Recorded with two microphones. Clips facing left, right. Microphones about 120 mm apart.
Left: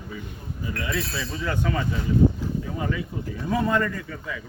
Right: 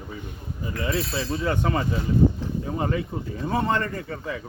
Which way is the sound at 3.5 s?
35° right (ahead or behind).